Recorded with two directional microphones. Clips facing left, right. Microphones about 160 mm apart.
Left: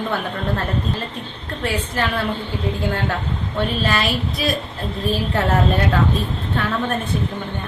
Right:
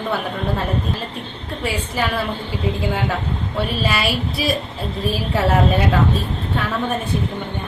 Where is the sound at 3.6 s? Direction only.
10° right (ahead or behind).